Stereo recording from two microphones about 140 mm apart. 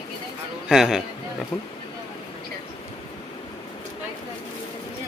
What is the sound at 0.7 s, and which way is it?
Speech, 5° right (ahead or behind).